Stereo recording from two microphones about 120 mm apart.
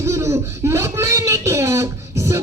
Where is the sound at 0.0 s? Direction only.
25° right (ahead or behind).